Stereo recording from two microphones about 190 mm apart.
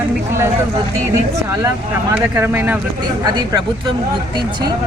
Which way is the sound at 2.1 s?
10° right (ahead or behind).